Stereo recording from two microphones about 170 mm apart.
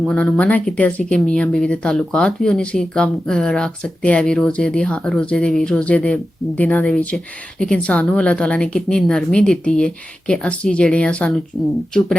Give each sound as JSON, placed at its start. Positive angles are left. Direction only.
{"t": 0.0, "sound": "speech", "side_deg": 5}